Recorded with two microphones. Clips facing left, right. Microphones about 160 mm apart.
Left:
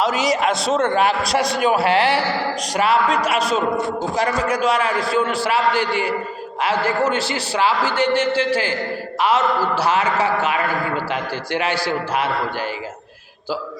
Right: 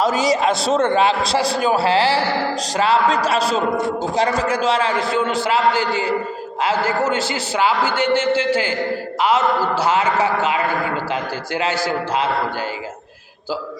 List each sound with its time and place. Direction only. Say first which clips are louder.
0.0 s a man's voice: right 2 dB; 35° right (ahead or behind)
9.7 s a man's voice: right 1 dB; 20° right (ahead or behind)